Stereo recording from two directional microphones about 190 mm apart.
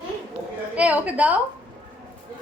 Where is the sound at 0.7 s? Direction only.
5° right (ahead or behind).